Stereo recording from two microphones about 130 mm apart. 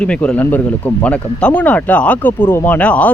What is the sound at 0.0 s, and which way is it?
Speech, 10° left (ahead or behind).